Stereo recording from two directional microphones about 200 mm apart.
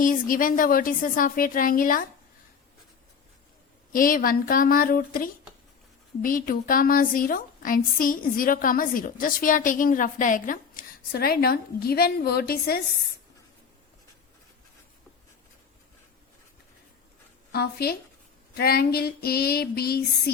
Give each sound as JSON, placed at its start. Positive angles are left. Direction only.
{"t": 0.0, "sound": "a woman's voice", "side_deg": 45}
{"t": 3.9, "sound": "a woman's voice", "side_deg": 45}
{"t": 17.5, "sound": "a woman's voice", "side_deg": 50}